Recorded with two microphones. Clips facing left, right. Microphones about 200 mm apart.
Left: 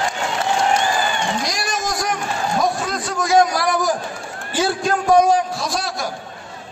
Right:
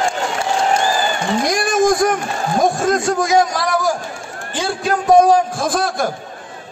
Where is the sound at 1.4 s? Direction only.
50° right (ahead or behind).